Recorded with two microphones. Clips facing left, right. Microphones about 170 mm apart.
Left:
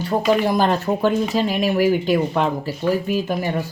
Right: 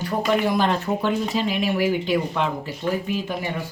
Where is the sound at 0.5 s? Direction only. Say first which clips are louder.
Left 3 dB; 40° left (ahead or behind).